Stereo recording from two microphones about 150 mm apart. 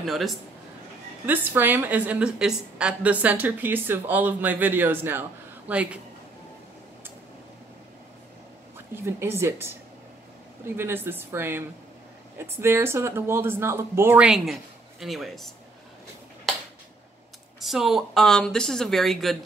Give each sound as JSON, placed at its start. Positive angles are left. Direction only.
{"t": 0.0, "sound": "speech", "side_deg": 0}
{"t": 1.2, "sound": "a woman's voice", "side_deg": -10}
{"t": 8.9, "sound": "a woman's voice", "side_deg": -15}
{"t": 16.5, "sound": "a sound", "side_deg": 5}
{"t": 17.6, "sound": "speech", "side_deg": 0}